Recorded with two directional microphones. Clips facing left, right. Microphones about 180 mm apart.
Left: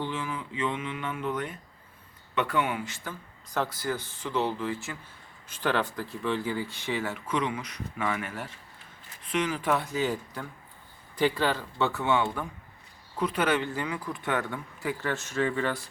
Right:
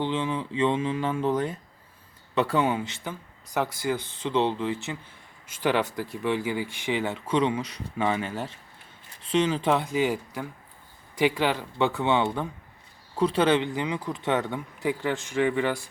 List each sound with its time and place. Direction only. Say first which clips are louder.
0.0 s speech: right 6 dB; 20° right (ahead or behind)